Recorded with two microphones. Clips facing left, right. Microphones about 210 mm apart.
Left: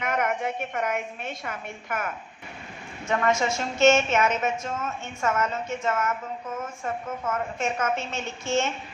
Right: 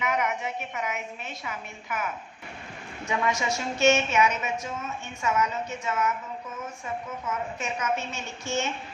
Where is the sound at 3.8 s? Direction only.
50° left (ahead or behind).